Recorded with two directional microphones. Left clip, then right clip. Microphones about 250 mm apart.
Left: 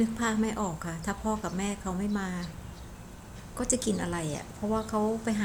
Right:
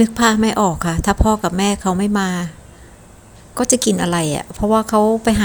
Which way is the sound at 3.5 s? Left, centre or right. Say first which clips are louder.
Right 14 dB; right.